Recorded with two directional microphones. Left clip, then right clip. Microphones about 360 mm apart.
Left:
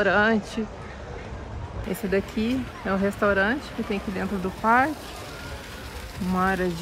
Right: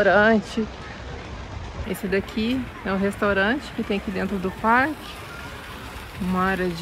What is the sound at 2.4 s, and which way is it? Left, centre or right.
Speech, centre.